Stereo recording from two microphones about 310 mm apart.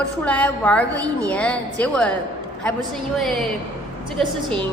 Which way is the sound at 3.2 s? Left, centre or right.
Centre.